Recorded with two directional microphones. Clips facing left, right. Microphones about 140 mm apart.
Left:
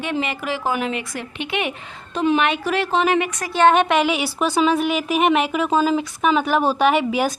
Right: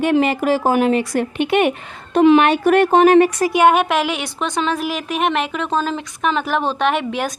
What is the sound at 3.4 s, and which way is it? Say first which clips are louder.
A woman's voice: right 2 dB; 15° right (ahead or behind).